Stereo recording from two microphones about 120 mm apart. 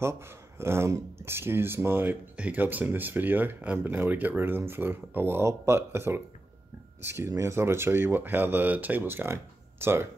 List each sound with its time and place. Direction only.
0.6 s speech: 20° right (ahead or behind)